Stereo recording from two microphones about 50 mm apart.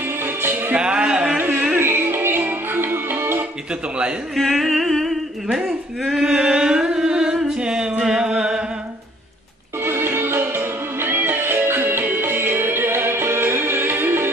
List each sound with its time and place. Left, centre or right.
0.2 s music: right
0.7 s a sound: centre
1.8 s music: right
4.4 s music: centre
6.0 s a sound: centre
8.0 s chant: centre
9.8 s music: right